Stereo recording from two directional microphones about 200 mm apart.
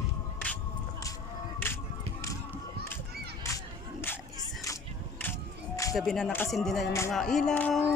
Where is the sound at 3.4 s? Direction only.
15° left (ahead or behind).